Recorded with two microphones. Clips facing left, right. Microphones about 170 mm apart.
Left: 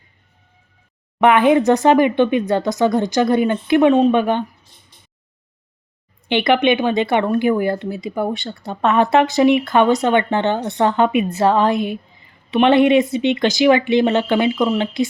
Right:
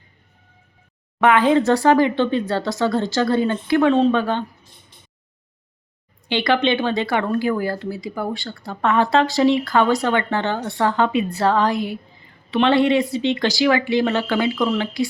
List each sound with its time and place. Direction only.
1.2 s speech: 20° left (ahead or behind)
6.2 s speech: 20° left (ahead or behind)